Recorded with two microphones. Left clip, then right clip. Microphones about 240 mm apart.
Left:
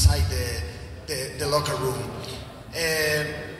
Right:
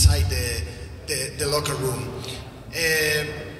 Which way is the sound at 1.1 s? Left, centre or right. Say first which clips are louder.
Even; right.